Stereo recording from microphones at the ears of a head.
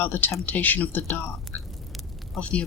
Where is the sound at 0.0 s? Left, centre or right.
Left.